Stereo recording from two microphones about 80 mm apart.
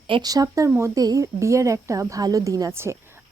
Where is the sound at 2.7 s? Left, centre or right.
Right.